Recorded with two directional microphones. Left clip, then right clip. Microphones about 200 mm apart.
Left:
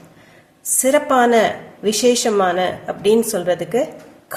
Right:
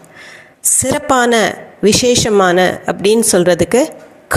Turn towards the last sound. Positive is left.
turn(degrees=-45)  # may be behind; listen again after turning